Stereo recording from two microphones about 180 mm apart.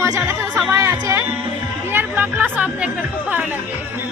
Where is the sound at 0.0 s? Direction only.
15° right (ahead or behind).